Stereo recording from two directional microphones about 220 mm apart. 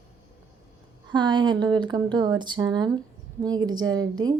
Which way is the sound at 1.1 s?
20° right (ahead or behind).